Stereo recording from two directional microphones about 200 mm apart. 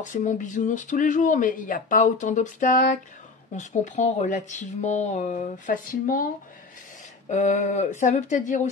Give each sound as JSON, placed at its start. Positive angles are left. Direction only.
{"t": 0.0, "sound": "speech", "side_deg": 40}
{"t": 7.2, "sound": "speech", "side_deg": 35}